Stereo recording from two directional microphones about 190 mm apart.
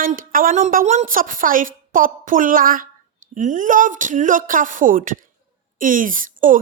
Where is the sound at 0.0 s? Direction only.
45° right (ahead or behind).